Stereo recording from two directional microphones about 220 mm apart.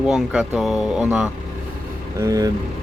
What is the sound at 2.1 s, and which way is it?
Speech, 15° right (ahead or behind).